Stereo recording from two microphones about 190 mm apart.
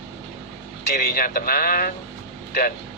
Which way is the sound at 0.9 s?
50° left (ahead or behind).